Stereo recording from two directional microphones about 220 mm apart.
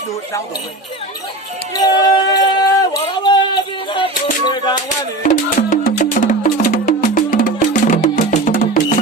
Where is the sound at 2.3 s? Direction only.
15° left (ahead or behind).